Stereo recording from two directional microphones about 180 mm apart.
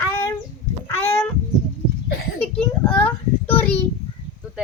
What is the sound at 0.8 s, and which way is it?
Speech, 10° left (ahead or behind).